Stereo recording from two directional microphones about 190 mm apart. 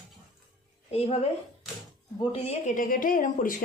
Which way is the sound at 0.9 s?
30° left (ahead or behind).